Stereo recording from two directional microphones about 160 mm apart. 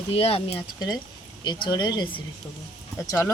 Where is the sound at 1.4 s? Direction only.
25° left (ahead or behind).